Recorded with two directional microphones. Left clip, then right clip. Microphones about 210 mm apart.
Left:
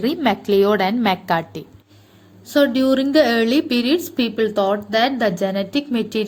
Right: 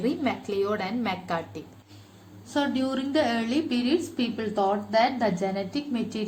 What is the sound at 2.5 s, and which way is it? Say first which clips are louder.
A woman's voice: left 11 dB; 50° left (ahead or behind).